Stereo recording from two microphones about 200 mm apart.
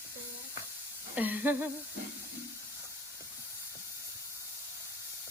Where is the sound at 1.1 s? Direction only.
10° right (ahead or behind).